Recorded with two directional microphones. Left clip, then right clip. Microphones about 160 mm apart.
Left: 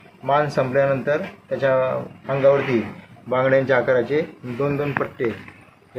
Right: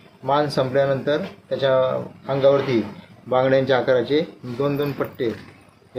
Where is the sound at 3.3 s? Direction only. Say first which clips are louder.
Even; 35° right (ahead or behind).